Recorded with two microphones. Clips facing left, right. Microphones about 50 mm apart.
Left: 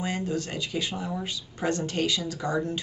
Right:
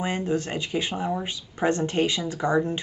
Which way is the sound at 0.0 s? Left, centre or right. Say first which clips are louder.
Right 4 dB; right.